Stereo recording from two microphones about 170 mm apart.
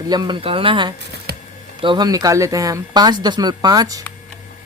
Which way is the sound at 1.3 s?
70° right (ahead or behind).